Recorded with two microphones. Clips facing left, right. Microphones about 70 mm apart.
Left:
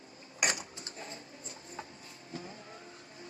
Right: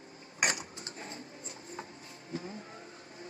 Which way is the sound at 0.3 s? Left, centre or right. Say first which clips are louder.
Right 1 dB; right.